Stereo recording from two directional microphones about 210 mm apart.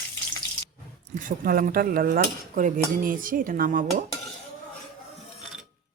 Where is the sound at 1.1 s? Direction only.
40° right (ahead or behind).